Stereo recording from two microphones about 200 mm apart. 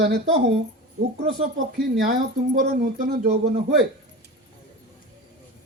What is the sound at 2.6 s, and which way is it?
Speech, 50° right (ahead or behind).